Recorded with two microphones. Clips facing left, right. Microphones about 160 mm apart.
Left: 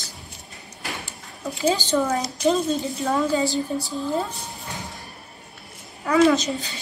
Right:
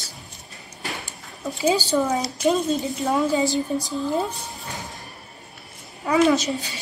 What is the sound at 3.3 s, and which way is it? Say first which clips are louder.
Speech: right 1 dB; 15° right (ahead or behind).